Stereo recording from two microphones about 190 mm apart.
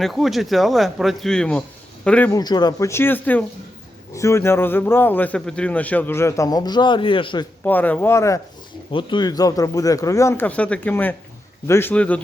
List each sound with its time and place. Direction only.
0.0 s speech: centre (ahead or behind)
2.4 s speech: 20° left (ahead or behind)
7.6 s speech: 10° left (ahead or behind)
8.9 s speech: 25° left (ahead or behind); by 12.2 s 10° left (ahead or behind)